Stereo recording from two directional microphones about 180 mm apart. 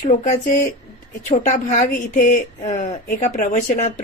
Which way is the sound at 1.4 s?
45° left (ahead or behind).